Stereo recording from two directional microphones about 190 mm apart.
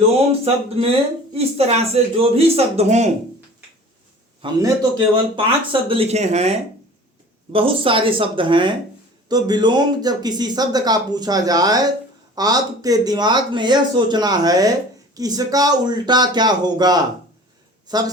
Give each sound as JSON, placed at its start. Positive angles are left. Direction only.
{"t": 0.3, "sound": "speech", "side_deg": -30}
{"t": 4.6, "sound": "speech", "side_deg": -20}